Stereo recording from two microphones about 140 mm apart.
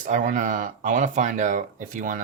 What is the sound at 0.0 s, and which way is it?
Speech, 70° right (ahead or behind).